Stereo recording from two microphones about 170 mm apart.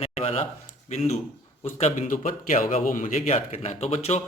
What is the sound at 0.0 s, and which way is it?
A man's voice, 35° left (ahead or behind).